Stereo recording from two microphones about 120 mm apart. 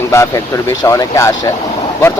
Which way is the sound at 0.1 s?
25° left (ahead or behind).